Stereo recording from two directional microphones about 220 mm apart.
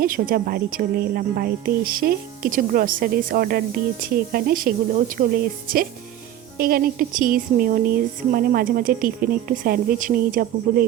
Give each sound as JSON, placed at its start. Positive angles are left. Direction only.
{"t": 0.0, "sound": "a woman's voice", "side_deg": -40}